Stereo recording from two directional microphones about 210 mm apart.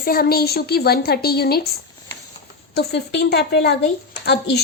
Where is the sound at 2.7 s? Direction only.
55° left (ahead or behind).